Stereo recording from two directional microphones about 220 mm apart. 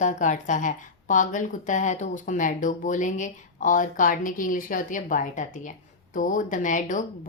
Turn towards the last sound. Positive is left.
turn(degrees=35)  # may be behind; listen again after turning